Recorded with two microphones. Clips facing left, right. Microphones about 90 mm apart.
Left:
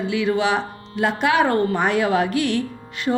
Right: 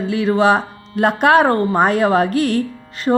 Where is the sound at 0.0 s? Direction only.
40° right (ahead or behind).